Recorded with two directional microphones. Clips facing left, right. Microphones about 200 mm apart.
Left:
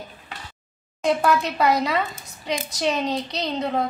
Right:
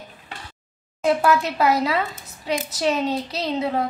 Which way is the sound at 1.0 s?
5° right (ahead or behind).